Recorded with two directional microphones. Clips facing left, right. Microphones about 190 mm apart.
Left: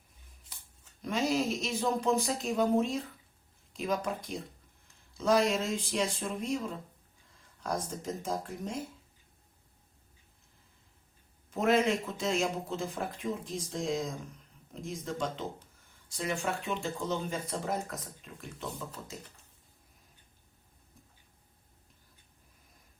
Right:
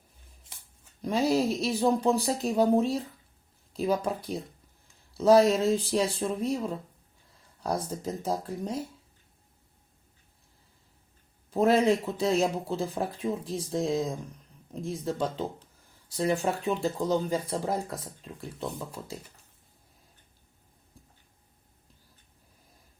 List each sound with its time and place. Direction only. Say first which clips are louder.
1.0 s speech: right 5 dB; 35° right (ahead or behind)
7.6 s speech: right 4 dB; 30° right (ahead or behind)
11.5 s speech: right 5 dB; 35° right (ahead or behind)